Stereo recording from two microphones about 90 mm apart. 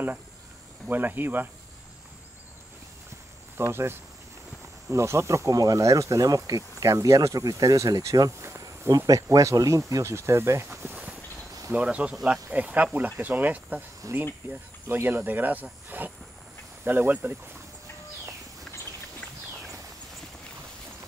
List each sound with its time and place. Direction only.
0.8 s speech: 20° right (ahead or behind)
3.5 s speech: 30° right (ahead or behind)
4.9 s speech: 30° right (ahead or behind)
8.9 s speech: 40° right (ahead or behind)
11.7 s speech: 15° right (ahead or behind)